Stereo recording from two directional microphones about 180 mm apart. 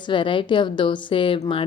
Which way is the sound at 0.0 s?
25° left (ahead or behind).